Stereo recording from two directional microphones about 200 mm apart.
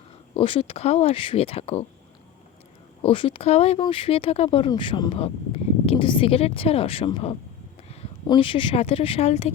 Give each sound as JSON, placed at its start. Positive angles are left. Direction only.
{"t": 0.3, "sound": "speech", "side_deg": 25}
{"t": 3.0, "sound": "speech", "side_deg": 25}